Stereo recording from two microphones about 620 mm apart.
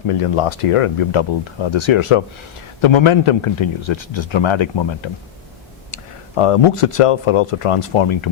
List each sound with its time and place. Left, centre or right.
0.1 s a man's voice: left